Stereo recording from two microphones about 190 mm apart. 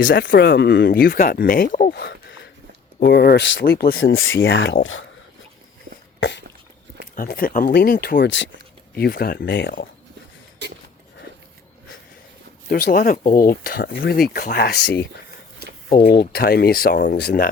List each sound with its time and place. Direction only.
0.3 s speech: 60° left (ahead or behind)
3.0 s speech: 55° left (ahead or behind)
4.0 s speech: 90° left
6.1 s a sound: 75° left (ahead or behind)
7.2 s speech: 50° left (ahead or behind); by 8.4 s 70° left (ahead or behind)
9.0 s speech: 55° left (ahead or behind)
10.6 s a sound: 65° right (ahead or behind)
12.6 s speech: 45° left (ahead or behind)
15.9 s speech: 50° left (ahead or behind)